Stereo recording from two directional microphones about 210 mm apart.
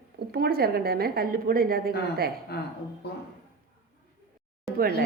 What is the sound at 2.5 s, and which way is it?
Speech, 45° left (ahead or behind).